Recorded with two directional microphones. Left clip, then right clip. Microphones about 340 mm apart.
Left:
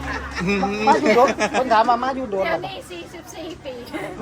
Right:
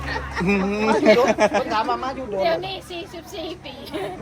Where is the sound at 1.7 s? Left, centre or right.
Left.